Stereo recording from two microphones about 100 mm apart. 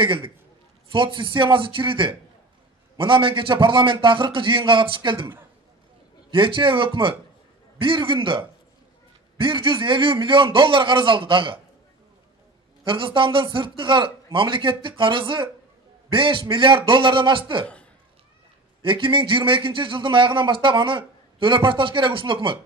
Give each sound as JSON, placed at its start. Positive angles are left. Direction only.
{"t": 0.0, "sound": "a man's voice", "side_deg": -60}
{"t": 6.3, "sound": "a man's voice", "side_deg": -55}
{"t": 12.8, "sound": "a man's voice", "side_deg": -60}
{"t": 18.8, "sound": "a man's voice", "side_deg": -60}